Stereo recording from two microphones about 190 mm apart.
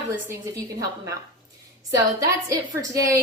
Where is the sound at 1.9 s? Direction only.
15° right (ahead or behind).